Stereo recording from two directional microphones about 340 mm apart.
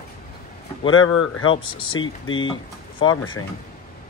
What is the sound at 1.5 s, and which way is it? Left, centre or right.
Speech, centre.